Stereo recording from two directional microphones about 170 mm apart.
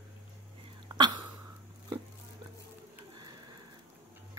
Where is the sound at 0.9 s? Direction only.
25° right (ahead or behind).